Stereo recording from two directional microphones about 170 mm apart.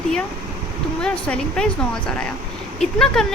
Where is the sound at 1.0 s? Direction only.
5° left (ahead or behind).